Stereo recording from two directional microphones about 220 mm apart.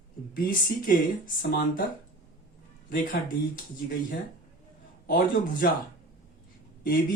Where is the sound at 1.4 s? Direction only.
40° left (ahead or behind).